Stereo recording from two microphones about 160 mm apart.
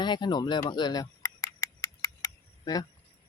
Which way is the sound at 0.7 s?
25° left (ahead or behind).